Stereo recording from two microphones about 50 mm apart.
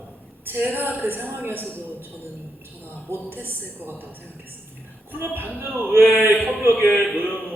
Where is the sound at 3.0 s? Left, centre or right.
Right.